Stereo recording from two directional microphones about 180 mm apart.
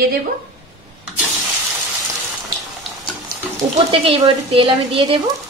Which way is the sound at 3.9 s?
30° right (ahead or behind).